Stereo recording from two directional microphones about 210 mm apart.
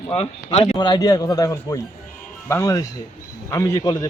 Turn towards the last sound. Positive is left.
turn(degrees=15)  # may be behind; listen again after turning